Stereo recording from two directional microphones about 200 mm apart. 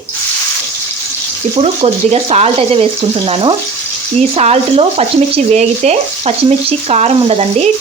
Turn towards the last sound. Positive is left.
turn(degrees=-30)  # may be behind; listen again after turning